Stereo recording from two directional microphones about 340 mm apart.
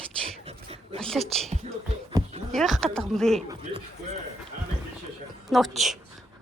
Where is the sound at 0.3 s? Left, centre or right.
Centre.